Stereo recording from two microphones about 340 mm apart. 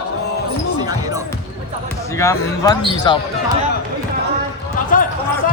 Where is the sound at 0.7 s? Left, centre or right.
Centre.